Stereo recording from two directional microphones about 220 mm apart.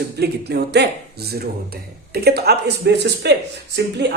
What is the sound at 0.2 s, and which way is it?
Speech, 50° right (ahead or behind).